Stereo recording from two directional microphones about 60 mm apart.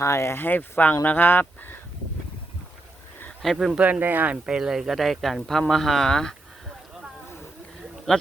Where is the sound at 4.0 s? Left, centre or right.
Right.